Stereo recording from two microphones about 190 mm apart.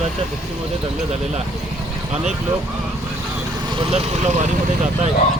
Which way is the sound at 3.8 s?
30° right (ahead or behind).